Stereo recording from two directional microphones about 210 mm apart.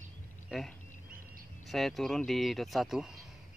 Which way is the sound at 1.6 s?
Centre (ahead or behind).